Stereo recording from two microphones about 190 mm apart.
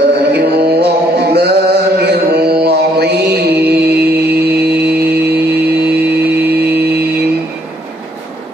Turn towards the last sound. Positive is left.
turn(degrees=-60)  # may be behind; listen again after turning